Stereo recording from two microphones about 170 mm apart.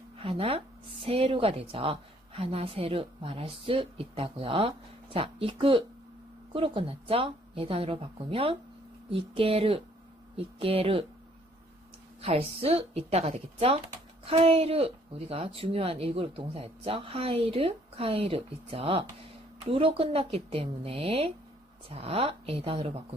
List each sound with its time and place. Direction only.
0.2 s a woman's voice: 30° right (ahead or behind)
12.2 s a woman's voice: 35° right (ahead or behind)